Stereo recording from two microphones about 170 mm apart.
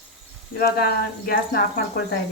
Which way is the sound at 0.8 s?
65° left (ahead or behind).